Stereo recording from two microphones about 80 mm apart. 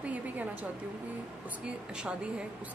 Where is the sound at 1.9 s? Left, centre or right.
Centre.